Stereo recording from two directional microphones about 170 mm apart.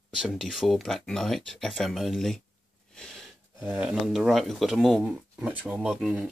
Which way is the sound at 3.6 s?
5° right (ahead or behind).